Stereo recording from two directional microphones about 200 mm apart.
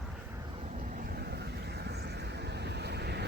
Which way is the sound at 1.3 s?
55° right (ahead or behind).